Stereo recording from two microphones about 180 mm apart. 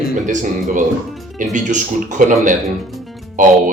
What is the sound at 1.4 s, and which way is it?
Speech, 45° right (ahead or behind).